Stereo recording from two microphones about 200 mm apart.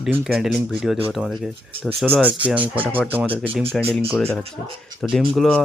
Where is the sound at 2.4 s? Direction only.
5° right (ahead or behind).